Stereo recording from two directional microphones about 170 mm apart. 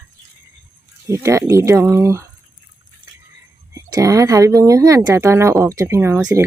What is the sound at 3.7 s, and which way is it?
Speech, 20° right (ahead or behind).